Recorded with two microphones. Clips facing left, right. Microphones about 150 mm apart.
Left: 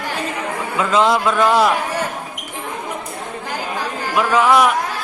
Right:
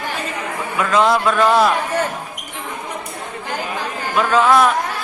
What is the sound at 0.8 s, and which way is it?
Speech, 20° left (ahead or behind).